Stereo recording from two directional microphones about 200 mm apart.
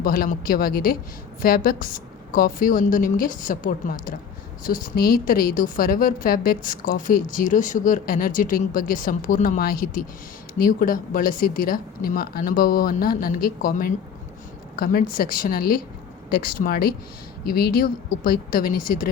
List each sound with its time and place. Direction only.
0.0 s a woman's voice: 45° left (ahead or behind)